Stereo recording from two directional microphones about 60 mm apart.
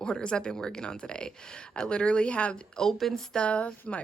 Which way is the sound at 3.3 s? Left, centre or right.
Left.